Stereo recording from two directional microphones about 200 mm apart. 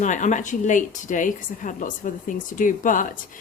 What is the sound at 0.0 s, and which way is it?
A woman's voice, 40° left (ahead or behind).